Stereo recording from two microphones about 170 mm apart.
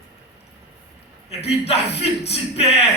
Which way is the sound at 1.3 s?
35° left (ahead or behind).